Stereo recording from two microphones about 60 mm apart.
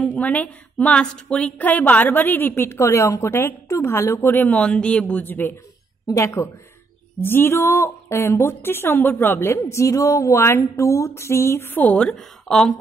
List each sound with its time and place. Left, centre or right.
0.0 s a woman's voice: left
4.5 s speech: centre
6.2 s a woman's voice: left
7.2 s a woman's voice: left
9.6 s a woman's voice: left
12.2 s speech: centre